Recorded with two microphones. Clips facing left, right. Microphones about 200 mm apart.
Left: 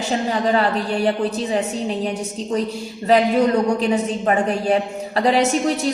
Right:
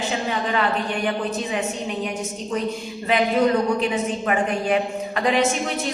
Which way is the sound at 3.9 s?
40° left (ahead or behind).